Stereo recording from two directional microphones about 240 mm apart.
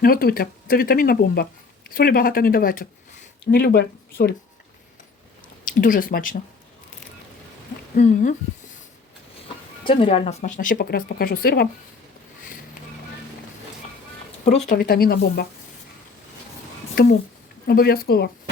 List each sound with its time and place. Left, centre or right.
0.0 s speech: left
5.7 s speech: left
7.9 s speech: left
9.8 s speech: left
14.7 s speech: left
16.9 s speech: left